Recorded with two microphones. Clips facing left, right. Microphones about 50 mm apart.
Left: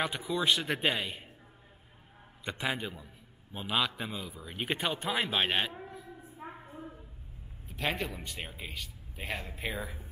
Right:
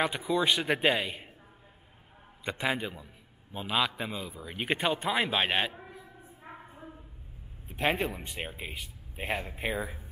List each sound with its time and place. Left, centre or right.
0.0 s speech: centre
2.4 s speech: centre
6.7 s a sound: centre
7.6 s speech: right